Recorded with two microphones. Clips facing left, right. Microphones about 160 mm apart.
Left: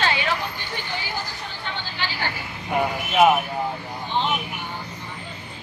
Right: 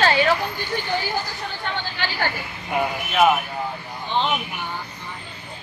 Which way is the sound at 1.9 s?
50° right (ahead or behind).